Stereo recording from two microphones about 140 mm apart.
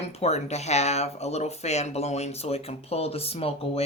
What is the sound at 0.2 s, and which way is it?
Speech, 50° left (ahead or behind).